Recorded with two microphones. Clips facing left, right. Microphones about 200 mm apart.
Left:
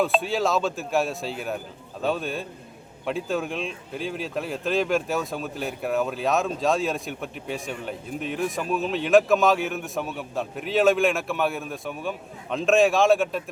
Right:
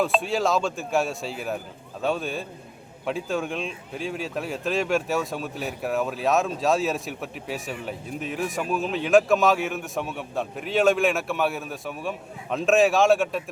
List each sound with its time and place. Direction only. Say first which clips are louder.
0.0 s speech: even; centre (ahead or behind)